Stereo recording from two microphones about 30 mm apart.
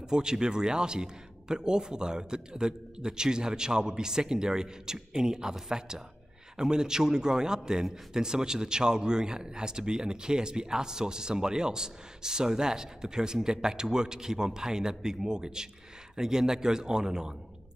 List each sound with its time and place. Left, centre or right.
0.1 s speech: right